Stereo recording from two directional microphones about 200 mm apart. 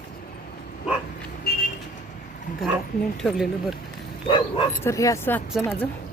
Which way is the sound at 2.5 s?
40° left (ahead or behind).